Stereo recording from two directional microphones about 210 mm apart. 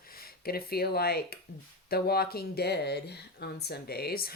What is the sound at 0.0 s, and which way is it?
Speech, 45° left (ahead or behind).